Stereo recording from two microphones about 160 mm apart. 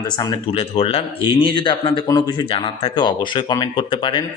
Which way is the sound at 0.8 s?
35° left (ahead or behind).